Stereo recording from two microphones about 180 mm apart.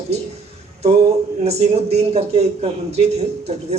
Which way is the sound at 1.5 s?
35° right (ahead or behind).